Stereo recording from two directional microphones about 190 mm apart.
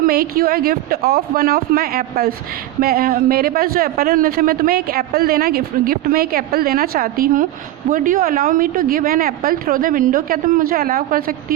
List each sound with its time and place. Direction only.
0.0 s a man's voice: 50° right (ahead or behind)